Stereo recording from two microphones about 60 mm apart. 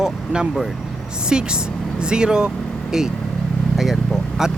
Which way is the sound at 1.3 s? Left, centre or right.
Centre.